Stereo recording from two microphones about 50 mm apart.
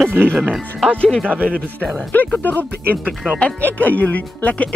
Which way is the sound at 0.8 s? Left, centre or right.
Left.